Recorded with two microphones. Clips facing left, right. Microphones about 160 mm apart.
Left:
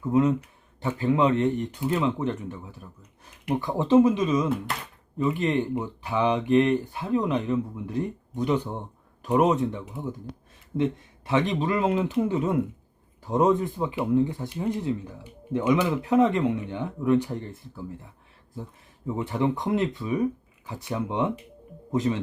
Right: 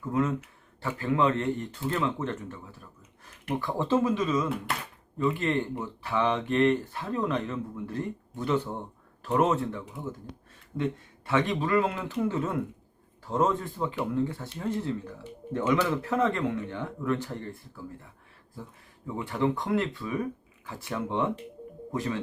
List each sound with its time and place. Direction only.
0.0 s speech: 20° left (ahead or behind)
11.3 s speech: 20° left (ahead or behind)
19.0 s speech: 20° left (ahead or behind)